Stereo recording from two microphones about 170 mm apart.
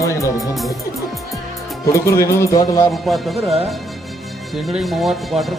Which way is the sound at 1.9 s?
15° left (ahead or behind).